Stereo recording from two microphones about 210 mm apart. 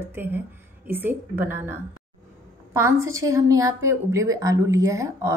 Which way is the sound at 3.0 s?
15° right (ahead or behind).